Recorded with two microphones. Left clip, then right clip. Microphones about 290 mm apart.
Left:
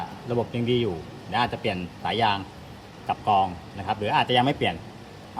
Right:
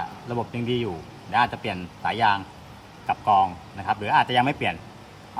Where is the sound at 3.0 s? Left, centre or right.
Right.